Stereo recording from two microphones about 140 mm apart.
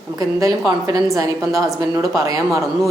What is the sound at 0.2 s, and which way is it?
A woman's voice, 25° right (ahead or behind).